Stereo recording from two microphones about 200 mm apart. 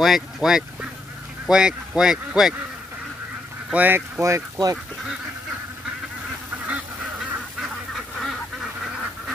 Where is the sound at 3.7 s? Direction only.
10° right (ahead or behind).